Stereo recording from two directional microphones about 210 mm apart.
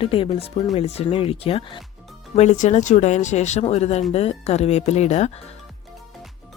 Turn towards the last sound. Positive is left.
turn(degrees=30)  # may be behind; listen again after turning